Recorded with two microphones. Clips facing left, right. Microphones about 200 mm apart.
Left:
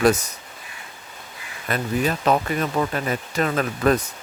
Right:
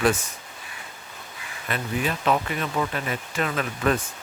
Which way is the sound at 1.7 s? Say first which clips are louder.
Left 4 dB; 40° left (ahead or behind).